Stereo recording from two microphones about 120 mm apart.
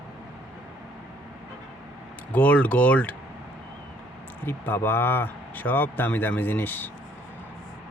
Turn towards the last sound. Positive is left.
turn(degrees=15)  # may be behind; listen again after turning